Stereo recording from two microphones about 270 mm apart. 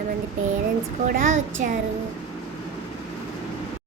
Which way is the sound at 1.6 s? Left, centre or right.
Right.